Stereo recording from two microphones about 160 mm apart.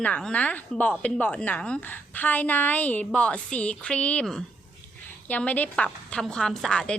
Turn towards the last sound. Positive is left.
turn(degrees=5)  # may be behind; listen again after turning